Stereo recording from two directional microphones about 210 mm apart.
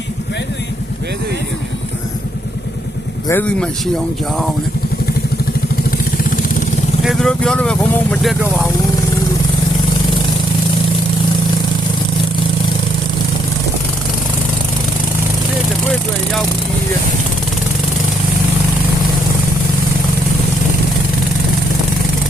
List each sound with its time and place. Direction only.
3.2 s speech: 10° left (ahead or behind)
6.3 s vehicle: 40° left (ahead or behind)
7.0 s speech: centre (ahead or behind)